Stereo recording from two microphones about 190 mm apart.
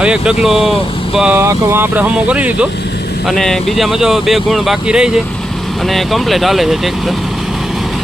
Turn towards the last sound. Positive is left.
turn(degrees=0)  # may be behind; listen again after turning